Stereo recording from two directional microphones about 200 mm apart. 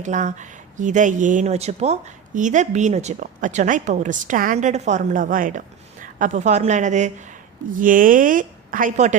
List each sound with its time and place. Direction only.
0.0 s speech: 35° right (ahead or behind)